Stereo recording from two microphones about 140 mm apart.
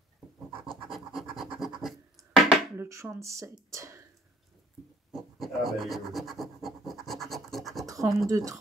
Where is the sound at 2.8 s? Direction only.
20° right (ahead or behind).